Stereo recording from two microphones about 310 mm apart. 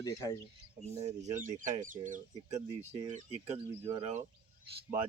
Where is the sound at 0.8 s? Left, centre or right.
Right.